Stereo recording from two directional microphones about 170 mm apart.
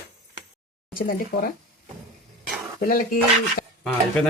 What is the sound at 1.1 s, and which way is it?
Speech, 60° left (ahead or behind).